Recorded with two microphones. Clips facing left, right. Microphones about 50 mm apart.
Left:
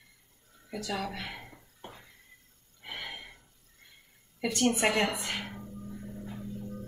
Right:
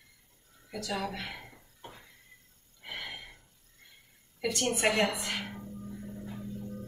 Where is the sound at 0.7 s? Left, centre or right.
Centre.